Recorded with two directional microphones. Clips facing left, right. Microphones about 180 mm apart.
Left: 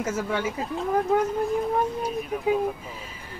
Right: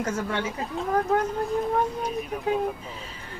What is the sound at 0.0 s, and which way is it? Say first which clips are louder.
Speech: left 1 dB; 5° left (ahead or behind).